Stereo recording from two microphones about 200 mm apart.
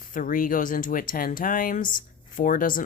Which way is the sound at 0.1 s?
40° left (ahead or behind).